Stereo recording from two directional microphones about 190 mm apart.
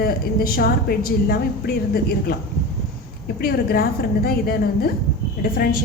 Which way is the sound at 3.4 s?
55° left (ahead or behind).